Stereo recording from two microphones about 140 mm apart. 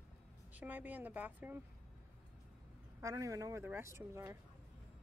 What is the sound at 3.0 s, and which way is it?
A woman's voice, 25° right (ahead or behind).